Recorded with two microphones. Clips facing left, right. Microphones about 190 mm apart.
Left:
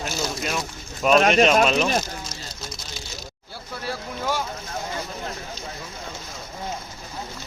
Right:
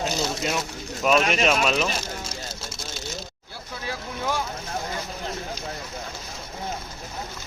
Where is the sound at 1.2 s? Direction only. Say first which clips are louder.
Left 6 dB; 45° left (ahead or behind).